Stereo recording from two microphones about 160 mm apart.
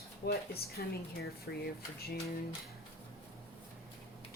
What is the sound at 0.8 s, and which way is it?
Speech, 65° left (ahead or behind).